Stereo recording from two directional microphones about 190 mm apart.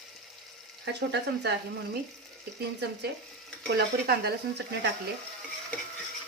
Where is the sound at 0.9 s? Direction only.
60° right (ahead or behind).